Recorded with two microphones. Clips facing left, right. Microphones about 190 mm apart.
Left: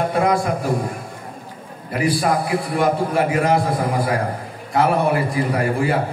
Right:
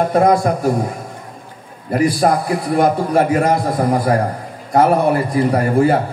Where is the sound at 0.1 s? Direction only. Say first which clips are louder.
Right 5 dB; 40° right (ahead or behind).